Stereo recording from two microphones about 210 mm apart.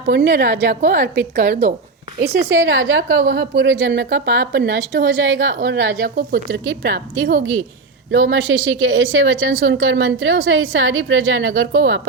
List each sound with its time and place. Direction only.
0.1 s a woman's voice: 50° right (ahead or behind)
2.2 s a woman's voice: 15° right (ahead or behind)
2.6 s a woman's voice: 65° right (ahead or behind)